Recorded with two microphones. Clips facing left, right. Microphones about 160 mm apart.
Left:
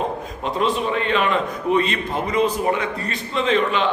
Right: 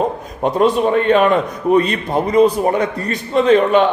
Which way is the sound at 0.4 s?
50° right (ahead or behind).